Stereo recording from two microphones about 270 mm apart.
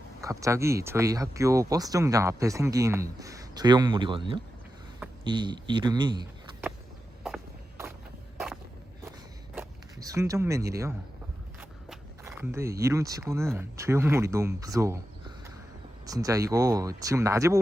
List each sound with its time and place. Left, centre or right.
0.2 s speech: centre
7.3 s a sound: centre
9.6 s speech: centre
16.0 s speech: centre